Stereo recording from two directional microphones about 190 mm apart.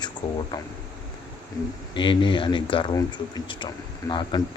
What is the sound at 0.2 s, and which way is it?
Speech, 25° left (ahead or behind).